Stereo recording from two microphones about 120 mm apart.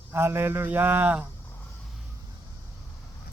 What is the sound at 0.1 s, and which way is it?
Speech, 20° right (ahead or behind).